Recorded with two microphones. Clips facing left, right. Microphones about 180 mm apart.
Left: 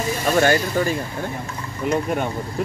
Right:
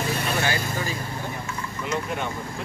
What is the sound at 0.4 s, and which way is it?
Speech, 55° left (ahead or behind).